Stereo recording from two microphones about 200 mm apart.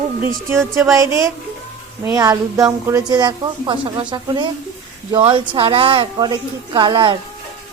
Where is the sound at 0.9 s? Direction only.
15° right (ahead or behind).